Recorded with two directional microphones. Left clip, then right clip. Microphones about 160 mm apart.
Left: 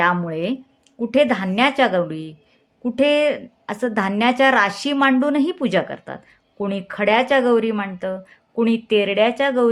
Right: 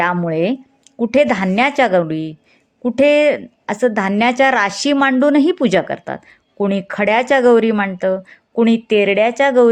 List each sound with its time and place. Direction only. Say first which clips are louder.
0.0 s a woman's voice: right 3 dB; 30° right (ahead or behind)